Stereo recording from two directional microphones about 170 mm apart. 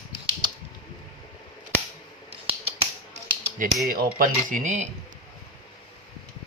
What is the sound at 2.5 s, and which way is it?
Finger snapping, 35° right (ahead or behind).